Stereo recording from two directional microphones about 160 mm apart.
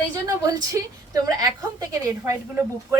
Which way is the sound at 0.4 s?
20° right (ahead or behind).